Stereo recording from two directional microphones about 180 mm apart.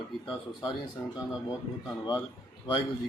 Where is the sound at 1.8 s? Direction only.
25° left (ahead or behind).